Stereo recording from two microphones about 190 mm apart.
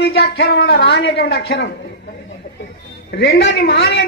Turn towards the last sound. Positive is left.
turn(degrees=65)  # may be behind; listen again after turning